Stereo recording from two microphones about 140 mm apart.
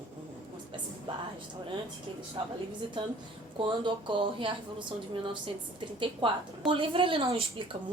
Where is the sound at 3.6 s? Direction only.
35° right (ahead or behind).